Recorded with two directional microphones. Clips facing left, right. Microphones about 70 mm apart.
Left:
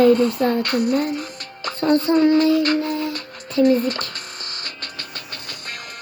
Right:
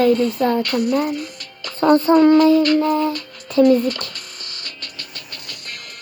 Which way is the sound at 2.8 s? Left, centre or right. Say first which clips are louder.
Right 6 dB; right.